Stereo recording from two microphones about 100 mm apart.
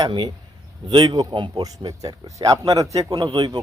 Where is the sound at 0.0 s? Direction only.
55° right (ahead or behind).